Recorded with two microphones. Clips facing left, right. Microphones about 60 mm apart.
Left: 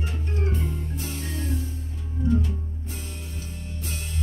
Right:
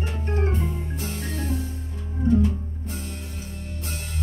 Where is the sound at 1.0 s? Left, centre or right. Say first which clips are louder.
Right 2 dB; right.